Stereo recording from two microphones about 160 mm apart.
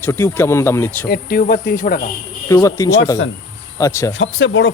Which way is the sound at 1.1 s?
65° left (ahead or behind).